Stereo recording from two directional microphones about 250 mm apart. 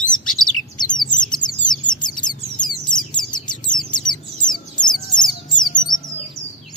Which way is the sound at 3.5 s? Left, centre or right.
Centre.